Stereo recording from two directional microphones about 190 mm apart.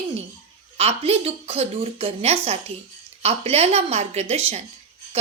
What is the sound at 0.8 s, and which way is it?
A woman's voice, 30° right (ahead or behind).